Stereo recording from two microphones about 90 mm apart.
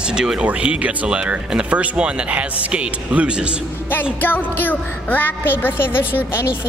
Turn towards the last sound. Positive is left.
turn(degrees=25)  # may be behind; listen again after turning